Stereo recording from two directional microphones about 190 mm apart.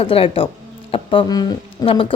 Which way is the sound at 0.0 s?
30° left (ahead or behind).